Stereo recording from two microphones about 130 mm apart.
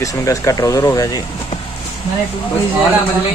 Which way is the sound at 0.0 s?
25° left (ahead or behind).